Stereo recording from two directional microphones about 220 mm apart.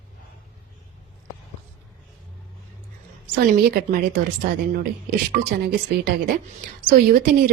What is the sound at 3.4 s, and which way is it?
Speech, 40° right (ahead or behind).